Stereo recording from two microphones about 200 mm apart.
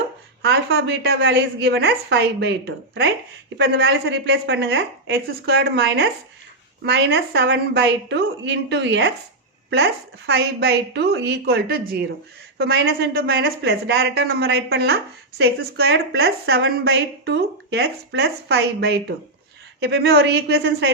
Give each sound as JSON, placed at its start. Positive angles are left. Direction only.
{"t": 0.4, "sound": "a woman's voice", "side_deg": -55}